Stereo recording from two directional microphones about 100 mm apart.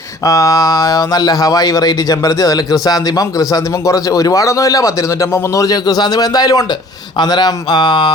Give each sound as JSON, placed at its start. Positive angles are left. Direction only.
{"t": 0.3, "sound": "a man's voice", "side_deg": 35}